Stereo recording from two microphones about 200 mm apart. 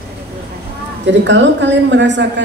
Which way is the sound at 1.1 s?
65° right (ahead or behind).